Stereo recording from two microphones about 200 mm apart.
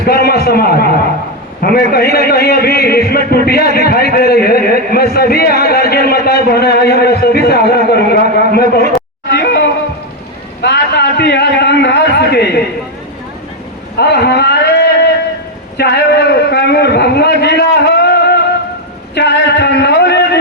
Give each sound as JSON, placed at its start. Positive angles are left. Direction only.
{"t": 0.0, "sound": "a sound", "side_deg": 50}
{"t": 1.6, "sound": "a man's voice", "side_deg": 50}
{"t": 9.3, "sound": "a sound", "side_deg": 55}
{"t": 10.6, "sound": "a man's voice", "side_deg": 60}
{"t": 13.9, "sound": "a man's voice", "side_deg": 55}
{"t": 19.1, "sound": "music", "side_deg": 55}